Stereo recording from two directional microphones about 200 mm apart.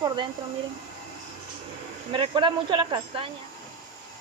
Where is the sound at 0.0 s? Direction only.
20° right (ahead or behind).